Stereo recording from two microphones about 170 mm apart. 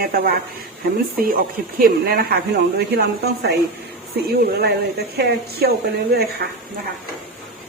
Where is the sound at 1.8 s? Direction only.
60° right (ahead or behind).